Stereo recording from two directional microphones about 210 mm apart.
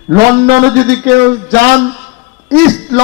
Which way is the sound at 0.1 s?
45° right (ahead or behind).